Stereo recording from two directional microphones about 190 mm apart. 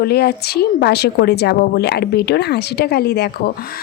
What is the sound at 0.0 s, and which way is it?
A woman's voice, 55° left (ahead or behind).